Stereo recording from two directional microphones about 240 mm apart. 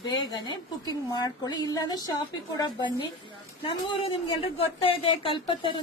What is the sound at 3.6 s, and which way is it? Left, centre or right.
Speech, left.